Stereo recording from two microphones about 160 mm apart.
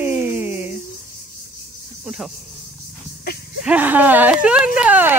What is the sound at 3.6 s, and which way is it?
Speech, 10° right (ahead or behind).